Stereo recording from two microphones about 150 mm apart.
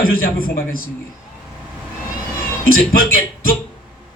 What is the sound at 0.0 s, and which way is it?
Music, 75° left (ahead or behind).